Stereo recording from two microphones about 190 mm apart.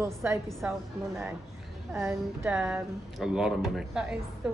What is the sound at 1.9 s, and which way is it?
A man's voice, 15° right (ahead or behind).